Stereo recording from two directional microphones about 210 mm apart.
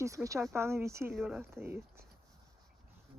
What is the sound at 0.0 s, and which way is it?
Speech, 15° right (ahead or behind).